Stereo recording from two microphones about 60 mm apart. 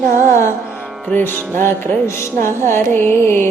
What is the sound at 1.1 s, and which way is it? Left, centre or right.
Music, left.